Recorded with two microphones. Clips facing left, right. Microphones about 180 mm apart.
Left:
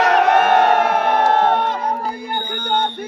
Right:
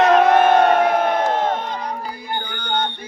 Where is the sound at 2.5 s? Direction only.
45° left (ahead or behind).